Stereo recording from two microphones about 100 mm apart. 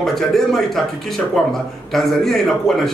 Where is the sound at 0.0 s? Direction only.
5° left (ahead or behind).